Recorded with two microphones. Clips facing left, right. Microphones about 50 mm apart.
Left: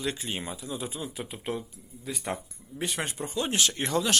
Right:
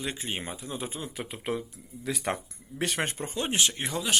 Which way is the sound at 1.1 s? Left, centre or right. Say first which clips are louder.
Right 1 dB; right.